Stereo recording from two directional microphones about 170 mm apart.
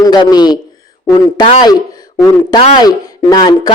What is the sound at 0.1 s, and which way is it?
Speech, 25° left (ahead or behind).